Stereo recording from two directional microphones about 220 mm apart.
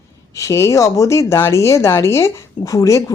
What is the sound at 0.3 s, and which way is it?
Speech, 15° left (ahead or behind).